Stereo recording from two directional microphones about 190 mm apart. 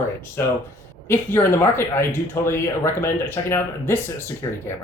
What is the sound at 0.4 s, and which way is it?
Speech, 10° left (ahead or behind).